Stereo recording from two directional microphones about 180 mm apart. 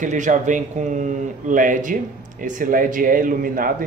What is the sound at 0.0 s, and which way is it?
A man's voice, 45° right (ahead or behind).